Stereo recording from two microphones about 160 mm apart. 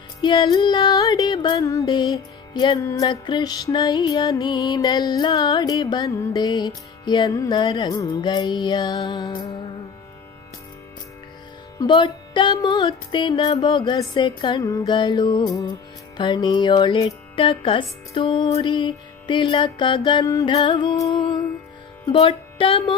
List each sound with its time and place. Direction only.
0.2 s music: 30° left (ahead or behind)
11.8 s music: 25° left (ahead or behind)